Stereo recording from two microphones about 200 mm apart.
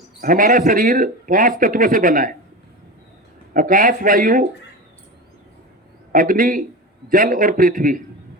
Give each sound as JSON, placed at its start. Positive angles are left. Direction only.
{"t": 0.2, "sound": "a man's voice", "side_deg": -45}
{"t": 3.5, "sound": "a man's voice", "side_deg": -45}
{"t": 6.1, "sound": "a man's voice", "side_deg": -45}